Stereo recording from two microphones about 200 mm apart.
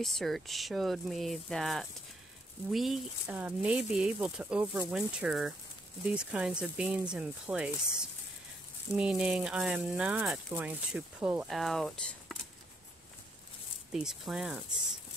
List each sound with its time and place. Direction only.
0.0 s speech: centre (ahead or behind)
13.9 s speech: centre (ahead or behind)